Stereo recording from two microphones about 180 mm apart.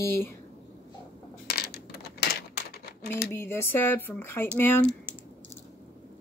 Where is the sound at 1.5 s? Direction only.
60° left (ahead or behind).